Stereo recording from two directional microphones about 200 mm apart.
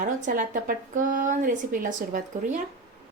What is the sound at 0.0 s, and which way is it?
A woman's voice, 40° right (ahead or behind).